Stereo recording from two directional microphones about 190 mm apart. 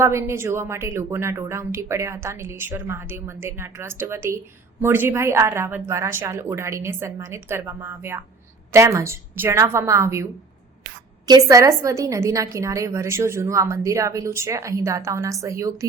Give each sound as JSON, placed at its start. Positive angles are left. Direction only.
{"t": 0.0, "sound": "a woman's voice", "side_deg": -15}
{"t": 11.3, "sound": "a woman's voice", "side_deg": -20}